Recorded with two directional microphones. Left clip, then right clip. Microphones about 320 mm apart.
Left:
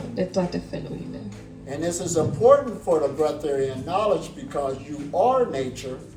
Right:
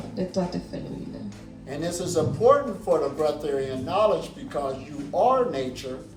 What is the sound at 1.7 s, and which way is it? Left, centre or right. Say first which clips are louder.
A man's voice: left 2 dB; centre.